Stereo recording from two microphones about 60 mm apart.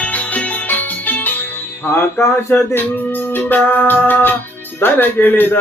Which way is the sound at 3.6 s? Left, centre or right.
Left.